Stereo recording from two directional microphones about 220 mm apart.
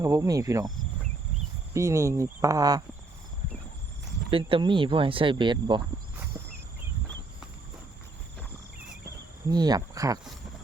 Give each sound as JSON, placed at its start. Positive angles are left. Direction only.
{"t": 0.0, "sound": "speech", "side_deg": -15}
{"t": 1.7, "sound": "speech", "side_deg": -15}
{"t": 4.3, "sound": "speech", "side_deg": -25}
{"t": 6.3, "sound": "a sound", "side_deg": -5}
{"t": 9.5, "sound": "speech", "side_deg": -20}